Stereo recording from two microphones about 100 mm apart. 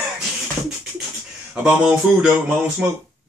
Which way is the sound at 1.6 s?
10° right (ahead or behind).